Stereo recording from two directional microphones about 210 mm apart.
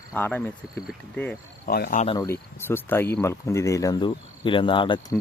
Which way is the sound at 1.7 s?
45° left (ahead or behind).